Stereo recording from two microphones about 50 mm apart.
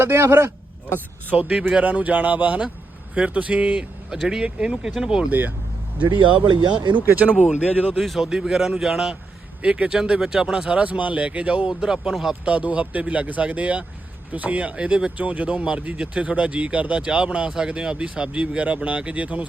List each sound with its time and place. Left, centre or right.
0.0 s speech: right
1.4 s speech: right
1.8 s speech: right
4.1 s speech: centre
5.3 s speech: right
6.0 s speech: right
7.9 s a man's voice: centre
8.2 s speech: centre
9.6 s speech: right
11.7 s speech: centre
12.5 s speech: right